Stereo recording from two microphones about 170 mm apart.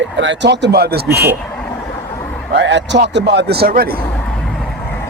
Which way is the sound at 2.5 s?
90° right.